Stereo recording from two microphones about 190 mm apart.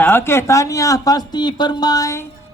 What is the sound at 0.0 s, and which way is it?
Speech, 10° left (ahead or behind).